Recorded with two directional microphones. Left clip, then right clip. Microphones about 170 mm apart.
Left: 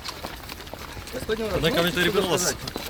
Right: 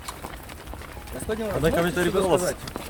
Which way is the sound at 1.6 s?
35° right (ahead or behind).